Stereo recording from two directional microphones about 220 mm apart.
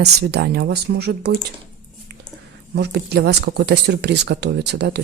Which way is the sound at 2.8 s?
50° right (ahead or behind).